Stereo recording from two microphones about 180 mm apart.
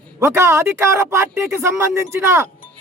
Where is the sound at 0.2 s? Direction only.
15° right (ahead or behind).